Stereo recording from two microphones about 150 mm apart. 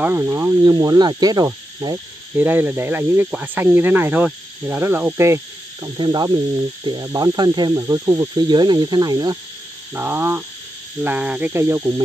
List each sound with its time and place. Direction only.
0.0 s snake: 15° right (ahead or behind)
2.3 s speech: 10° right (ahead or behind)
5.9 s snake: 30° right (ahead or behind)
9.9 s speech: 15° right (ahead or behind)